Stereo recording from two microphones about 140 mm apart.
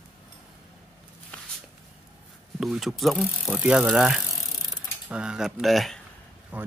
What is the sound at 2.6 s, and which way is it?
Speech, 5° right (ahead or behind).